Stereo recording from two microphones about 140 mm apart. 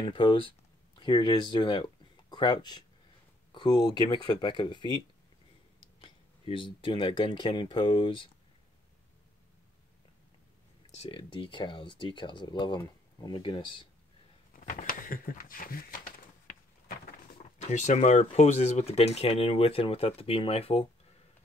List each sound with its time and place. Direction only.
0.0 s speech: 35° left (ahead or behind)
5.9 s speech: 35° left (ahead or behind)
11.0 s speech: 40° left (ahead or behind)
14.5 s a sound: 70° left (ahead or behind); by 17.4 s 90° left
17.6 s speech: 55° left (ahead or behind)